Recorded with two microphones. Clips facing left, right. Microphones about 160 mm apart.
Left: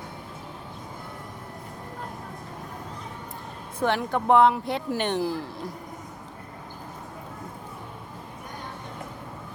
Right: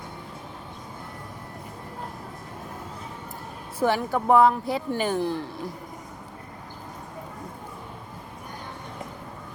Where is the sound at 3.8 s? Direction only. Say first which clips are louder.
Right 1 dB; 5° right (ahead or behind).